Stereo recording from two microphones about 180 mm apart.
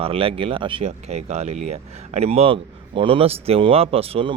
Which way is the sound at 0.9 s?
40° right (ahead or behind).